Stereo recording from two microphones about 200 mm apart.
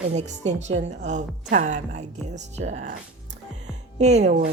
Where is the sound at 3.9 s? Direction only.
35° right (ahead or behind).